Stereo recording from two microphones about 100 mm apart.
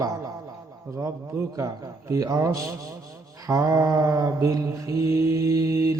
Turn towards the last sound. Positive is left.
turn(degrees=-30)  # may be behind; listen again after turning